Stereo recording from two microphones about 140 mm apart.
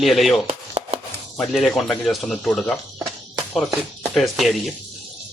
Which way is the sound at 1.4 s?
Centre (ahead or behind).